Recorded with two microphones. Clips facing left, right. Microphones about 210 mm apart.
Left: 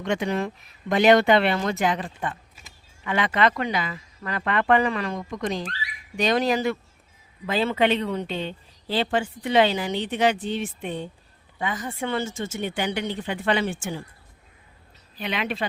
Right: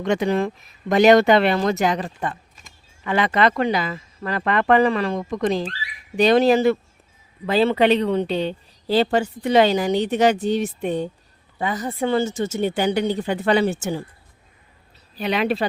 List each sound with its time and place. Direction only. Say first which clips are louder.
0.0 s speech: right 5 dB; 35° right (ahead or behind)
15.2 s speech: right 7 dB; 40° right (ahead or behind)